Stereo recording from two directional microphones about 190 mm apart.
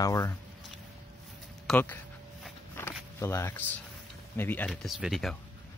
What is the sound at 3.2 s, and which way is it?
Speech, 15° left (ahead or behind).